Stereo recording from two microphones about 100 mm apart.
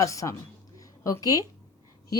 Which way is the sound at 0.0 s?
30° left (ahead or behind).